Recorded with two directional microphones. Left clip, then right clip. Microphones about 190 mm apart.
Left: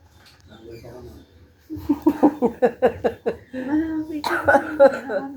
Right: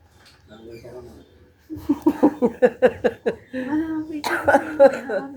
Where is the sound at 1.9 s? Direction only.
20° right (ahead or behind).